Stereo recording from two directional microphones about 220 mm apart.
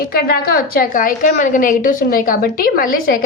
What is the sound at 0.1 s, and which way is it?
A woman's voice, 45° left (ahead or behind).